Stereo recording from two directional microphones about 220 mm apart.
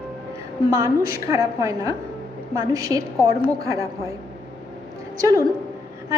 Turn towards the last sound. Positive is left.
turn(degrees=-15)  # may be behind; listen again after turning